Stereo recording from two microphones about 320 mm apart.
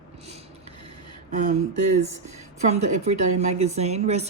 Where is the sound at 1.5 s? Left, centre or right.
Right.